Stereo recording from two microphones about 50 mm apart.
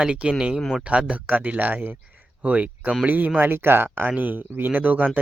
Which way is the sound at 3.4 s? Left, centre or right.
Right.